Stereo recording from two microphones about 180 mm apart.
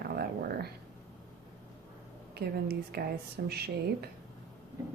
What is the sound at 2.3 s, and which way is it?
Speech, 60° right (ahead or behind).